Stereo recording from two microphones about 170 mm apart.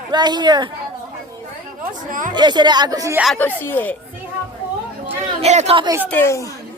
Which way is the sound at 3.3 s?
10° left (ahead or behind).